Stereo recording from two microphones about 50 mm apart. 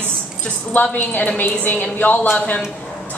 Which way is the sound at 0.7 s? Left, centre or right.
Left.